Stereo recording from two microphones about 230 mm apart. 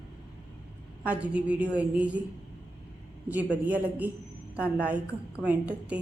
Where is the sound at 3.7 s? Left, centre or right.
Centre.